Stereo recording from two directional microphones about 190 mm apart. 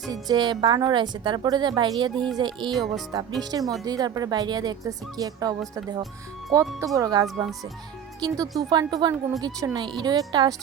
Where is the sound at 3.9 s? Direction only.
20° right (ahead or behind).